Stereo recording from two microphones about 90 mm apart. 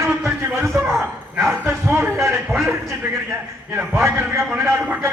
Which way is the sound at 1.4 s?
25° right (ahead or behind).